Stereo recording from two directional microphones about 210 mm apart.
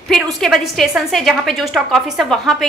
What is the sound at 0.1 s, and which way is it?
A woman's voice, centre (ahead or behind).